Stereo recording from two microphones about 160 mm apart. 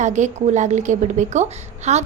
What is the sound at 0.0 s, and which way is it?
A woman's voice, 50° right (ahead or behind).